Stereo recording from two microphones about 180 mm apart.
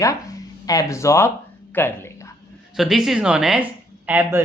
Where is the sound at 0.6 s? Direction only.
20° left (ahead or behind).